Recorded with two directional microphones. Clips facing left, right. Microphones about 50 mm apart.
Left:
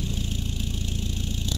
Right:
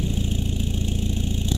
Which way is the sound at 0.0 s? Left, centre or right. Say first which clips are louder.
Right 5 dB; right.